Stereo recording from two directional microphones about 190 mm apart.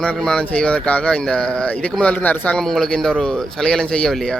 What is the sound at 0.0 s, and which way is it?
A man's voice, 5° left (ahead or behind).